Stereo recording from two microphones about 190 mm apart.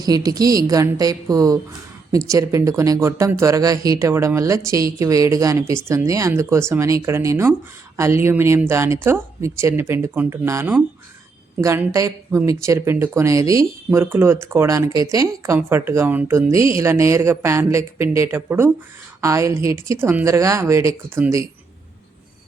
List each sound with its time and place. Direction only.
0.0 s a woman's voice: 20° right (ahead or behind)